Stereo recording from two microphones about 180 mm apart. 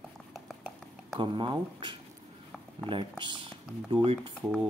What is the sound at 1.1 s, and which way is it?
Speech, 25° right (ahead or behind).